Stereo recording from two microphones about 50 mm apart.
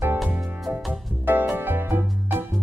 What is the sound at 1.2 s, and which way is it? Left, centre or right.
Music, right.